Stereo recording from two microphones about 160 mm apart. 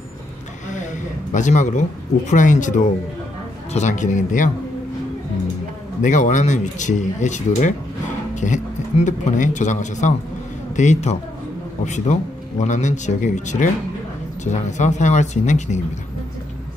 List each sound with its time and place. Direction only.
1.3 s speech: 50° left (ahead or behind)
5.9 s speech: 50° left (ahead or behind)